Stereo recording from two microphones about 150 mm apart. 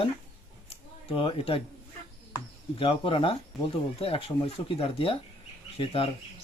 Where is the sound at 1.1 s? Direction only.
35° left (ahead or behind).